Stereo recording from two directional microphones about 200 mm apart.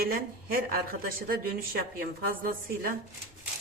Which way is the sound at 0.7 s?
45° right (ahead or behind).